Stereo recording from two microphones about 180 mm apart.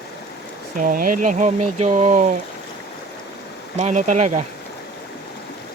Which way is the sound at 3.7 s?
40° right (ahead or behind).